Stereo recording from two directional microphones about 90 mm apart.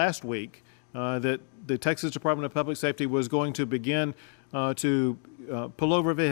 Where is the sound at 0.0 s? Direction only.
35° right (ahead or behind).